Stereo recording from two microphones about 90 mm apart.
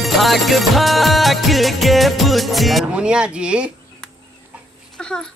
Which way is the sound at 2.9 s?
10° right (ahead or behind).